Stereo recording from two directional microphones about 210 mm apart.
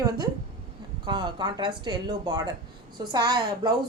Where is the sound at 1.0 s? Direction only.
20° right (ahead or behind).